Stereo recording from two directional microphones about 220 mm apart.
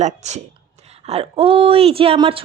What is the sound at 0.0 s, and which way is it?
A woman's voice, 30° right (ahead or behind).